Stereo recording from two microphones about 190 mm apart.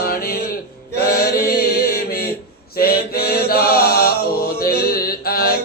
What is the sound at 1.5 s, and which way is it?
Chant, 55° left (ahead or behind).